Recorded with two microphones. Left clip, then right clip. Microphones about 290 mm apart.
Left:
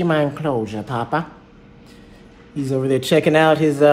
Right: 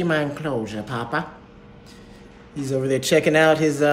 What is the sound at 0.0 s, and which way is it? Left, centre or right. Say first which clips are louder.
Speech: left 4 dB; centre.